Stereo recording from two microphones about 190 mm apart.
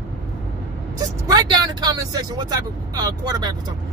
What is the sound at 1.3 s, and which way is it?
Speech, 20° right (ahead or behind).